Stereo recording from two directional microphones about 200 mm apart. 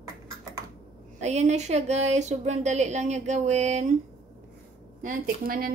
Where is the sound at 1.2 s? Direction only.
35° right (ahead or behind).